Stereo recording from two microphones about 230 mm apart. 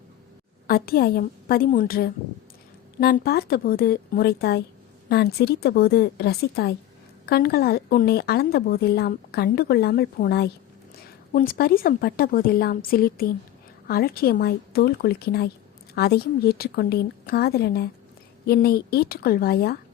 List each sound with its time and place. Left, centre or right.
0.7 s a woman's voice: left